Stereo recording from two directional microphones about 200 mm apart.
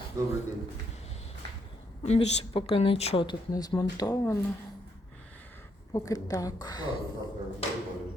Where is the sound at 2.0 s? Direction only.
30° left (ahead or behind).